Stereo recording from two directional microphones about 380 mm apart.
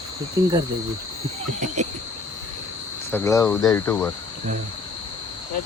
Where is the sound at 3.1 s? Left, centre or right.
Centre.